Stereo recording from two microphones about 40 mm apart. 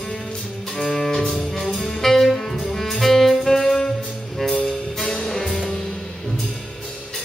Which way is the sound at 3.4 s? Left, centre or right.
Centre.